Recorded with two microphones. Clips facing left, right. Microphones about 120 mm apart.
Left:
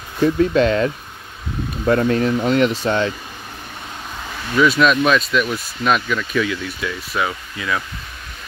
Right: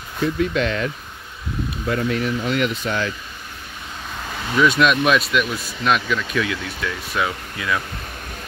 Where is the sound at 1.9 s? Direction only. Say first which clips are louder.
Left 6 dB; 45° left (ahead or behind).